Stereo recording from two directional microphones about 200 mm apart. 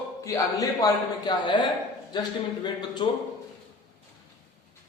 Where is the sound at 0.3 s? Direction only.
15° left (ahead or behind).